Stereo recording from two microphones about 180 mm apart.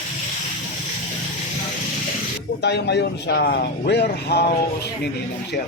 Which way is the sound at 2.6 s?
70° left (ahead or behind).